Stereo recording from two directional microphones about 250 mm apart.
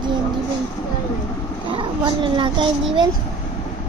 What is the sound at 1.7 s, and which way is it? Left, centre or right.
Speech, centre.